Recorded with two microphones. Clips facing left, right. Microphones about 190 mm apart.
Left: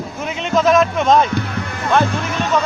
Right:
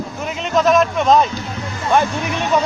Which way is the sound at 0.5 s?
Centre (ahead or behind).